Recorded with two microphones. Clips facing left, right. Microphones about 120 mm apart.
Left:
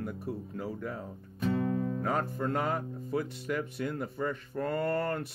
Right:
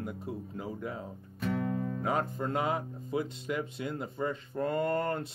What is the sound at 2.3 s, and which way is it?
Speech, 15° right (ahead or behind).